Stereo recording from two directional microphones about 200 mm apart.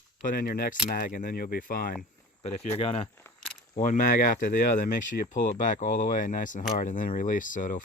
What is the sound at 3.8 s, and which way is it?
Speech, 40° left (ahead or behind).